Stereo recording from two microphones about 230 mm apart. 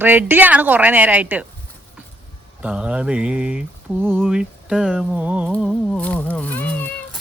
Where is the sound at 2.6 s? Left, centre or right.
Centre.